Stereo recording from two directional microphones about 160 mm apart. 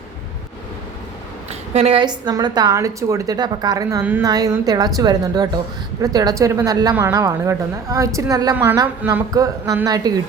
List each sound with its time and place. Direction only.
1.7 s a woman's voice: 40° right (ahead or behind)